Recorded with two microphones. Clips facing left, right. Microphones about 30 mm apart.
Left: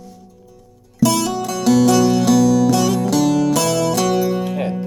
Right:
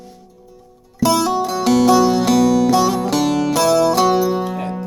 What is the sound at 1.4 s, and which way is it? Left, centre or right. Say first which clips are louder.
Music: left 2 dB; right.